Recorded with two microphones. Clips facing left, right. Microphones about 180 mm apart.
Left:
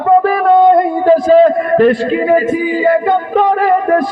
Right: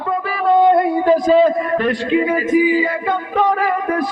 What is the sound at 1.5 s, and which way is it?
A man's voice, 40° left (ahead or behind).